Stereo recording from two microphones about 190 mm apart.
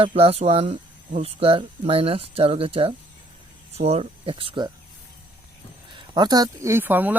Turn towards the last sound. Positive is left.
turn(degrees=-10)  # may be behind; listen again after turning